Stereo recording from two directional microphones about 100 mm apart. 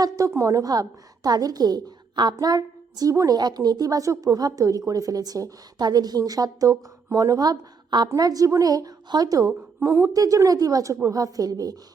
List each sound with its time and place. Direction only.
0.3 s a woman's voice: 30° right (ahead or behind)